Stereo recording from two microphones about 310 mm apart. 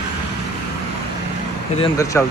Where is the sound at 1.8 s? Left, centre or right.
Centre.